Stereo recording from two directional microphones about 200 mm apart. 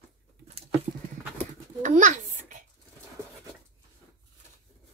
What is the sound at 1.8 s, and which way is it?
Babbling, 40° right (ahead or behind).